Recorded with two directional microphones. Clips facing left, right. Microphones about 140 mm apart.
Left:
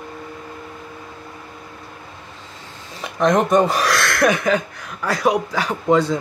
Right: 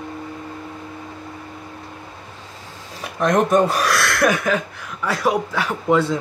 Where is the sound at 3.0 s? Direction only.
5° right (ahead or behind).